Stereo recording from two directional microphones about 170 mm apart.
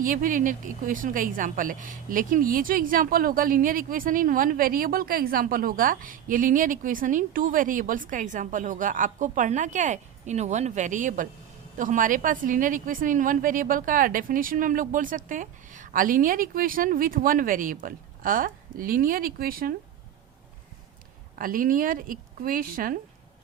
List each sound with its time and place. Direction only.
0.0 s a woman's voice: 55° right (ahead or behind)
21.3 s speech: 55° right (ahead or behind)